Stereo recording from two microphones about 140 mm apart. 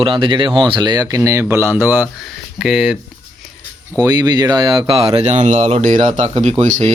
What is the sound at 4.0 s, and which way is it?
Speech, 25° right (ahead or behind).